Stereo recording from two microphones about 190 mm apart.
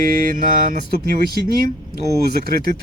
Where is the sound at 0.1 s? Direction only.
45° right (ahead or behind).